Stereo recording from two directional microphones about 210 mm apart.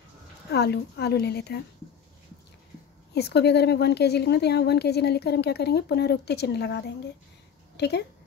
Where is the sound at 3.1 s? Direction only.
50° left (ahead or behind).